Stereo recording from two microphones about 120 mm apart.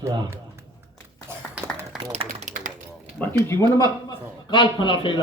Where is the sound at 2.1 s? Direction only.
65° right (ahead or behind).